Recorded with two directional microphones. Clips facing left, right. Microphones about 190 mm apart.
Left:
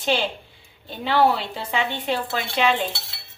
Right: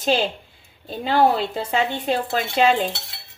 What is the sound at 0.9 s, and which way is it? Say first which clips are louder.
A woman's voice: right 1 dB; 40° right (ahead or behind).